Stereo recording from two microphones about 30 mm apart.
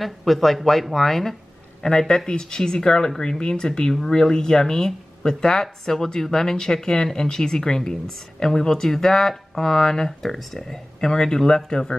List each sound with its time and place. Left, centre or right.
0.0 s speech: centre; by 11.8 s left